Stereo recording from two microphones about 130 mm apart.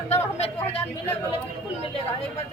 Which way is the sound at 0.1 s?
55° left (ahead or behind).